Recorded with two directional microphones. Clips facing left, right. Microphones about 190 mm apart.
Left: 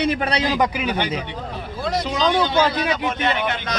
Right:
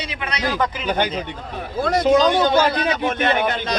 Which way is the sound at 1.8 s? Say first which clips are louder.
Right 6 dB; 50° right (ahead or behind).